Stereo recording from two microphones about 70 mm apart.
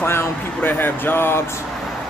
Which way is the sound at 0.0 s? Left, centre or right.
Left.